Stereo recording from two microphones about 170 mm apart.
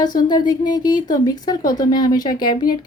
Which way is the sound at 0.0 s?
25° left (ahead or behind).